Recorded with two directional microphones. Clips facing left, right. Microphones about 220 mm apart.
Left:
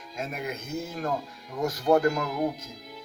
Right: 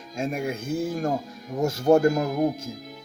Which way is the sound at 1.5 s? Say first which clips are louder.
Right 4 dB; 25° right (ahead or behind).